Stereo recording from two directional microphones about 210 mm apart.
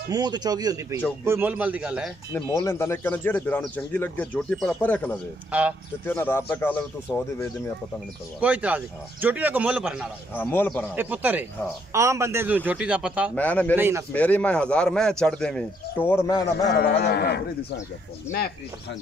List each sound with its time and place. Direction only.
0.1 s speech: 20° right (ahead or behind)
2.3 s speech: 15° left (ahead or behind)
5.5 s speech: 5° right (ahead or behind)
6.0 s speech: 10° left (ahead or behind)
8.4 s speech: 5° right (ahead or behind)
10.3 s speech: 10° left (ahead or behind)
11.0 s speech: 10° right (ahead or behind)
13.4 s speech: 5° left (ahead or behind)
13.7 s speech: 10° right (ahead or behind)
14.1 s speech: 5° left (ahead or behind)
16.7 s speech: 50° left (ahead or behind)